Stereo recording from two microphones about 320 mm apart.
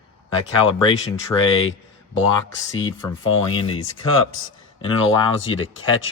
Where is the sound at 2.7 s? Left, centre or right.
Centre.